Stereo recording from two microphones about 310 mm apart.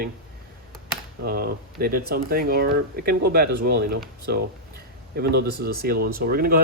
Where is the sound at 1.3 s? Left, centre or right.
Right.